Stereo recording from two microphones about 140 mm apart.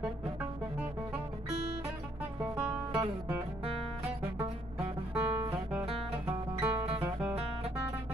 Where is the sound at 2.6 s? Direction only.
10° right (ahead or behind).